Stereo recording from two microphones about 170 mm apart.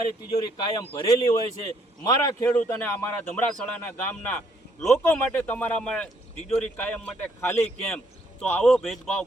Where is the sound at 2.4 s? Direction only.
10° left (ahead or behind).